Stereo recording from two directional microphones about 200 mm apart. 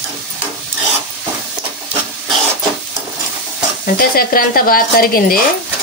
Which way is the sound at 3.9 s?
45° left (ahead or behind).